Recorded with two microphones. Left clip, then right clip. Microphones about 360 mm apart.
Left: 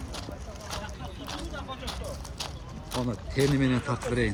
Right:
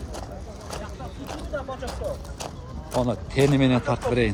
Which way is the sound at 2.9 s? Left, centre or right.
Centre.